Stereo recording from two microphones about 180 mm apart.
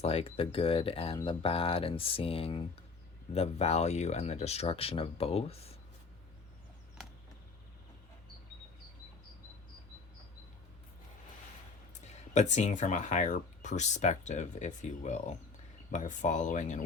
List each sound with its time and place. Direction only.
0.0 s speech: 35° left (ahead or behind)
12.3 s speech: 40° left (ahead or behind)